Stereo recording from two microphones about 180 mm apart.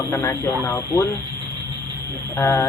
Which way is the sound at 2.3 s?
15° left (ahead or behind).